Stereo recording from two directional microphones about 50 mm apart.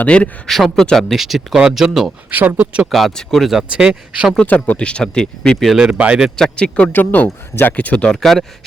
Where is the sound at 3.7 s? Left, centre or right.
Centre.